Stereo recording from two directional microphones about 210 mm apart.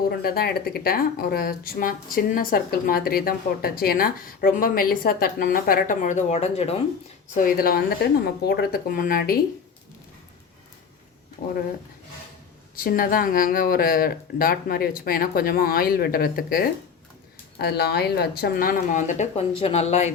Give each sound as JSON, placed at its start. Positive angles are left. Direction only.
{"t": 0.2, "sound": "speech", "side_deg": 45}
{"t": 7.3, "sound": "speech", "side_deg": 45}
{"t": 12.7, "sound": "speech", "side_deg": 45}